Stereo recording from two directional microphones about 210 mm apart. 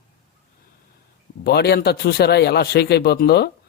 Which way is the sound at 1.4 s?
50° left (ahead or behind).